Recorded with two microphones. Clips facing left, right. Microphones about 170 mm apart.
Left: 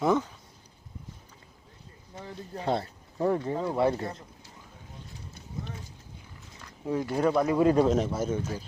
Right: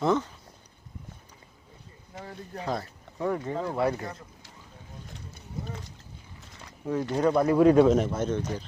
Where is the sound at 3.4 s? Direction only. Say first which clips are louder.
Left 1 dB; 10° left (ahead or behind).